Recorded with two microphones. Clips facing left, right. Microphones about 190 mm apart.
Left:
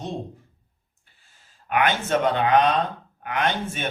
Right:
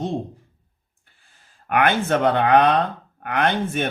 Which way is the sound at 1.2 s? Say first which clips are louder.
Right 3 dB; 55° right (ahead or behind).